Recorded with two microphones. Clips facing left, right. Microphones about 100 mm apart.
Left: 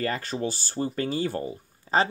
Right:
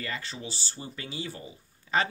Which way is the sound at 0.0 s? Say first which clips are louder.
Left 9 dB; 50° left (ahead or behind).